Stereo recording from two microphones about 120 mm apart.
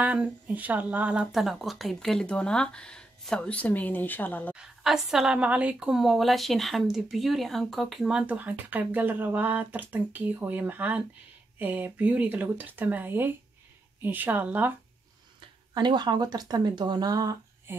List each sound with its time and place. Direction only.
0.0 s speech: 10° right (ahead or behind); by 4.6 s 15° left (ahead or behind)
4.6 s a woman's voice: 5° right (ahead or behind)
15.7 s speech: 40° right (ahead or behind)
17.7 s a sound: 20° right (ahead or behind)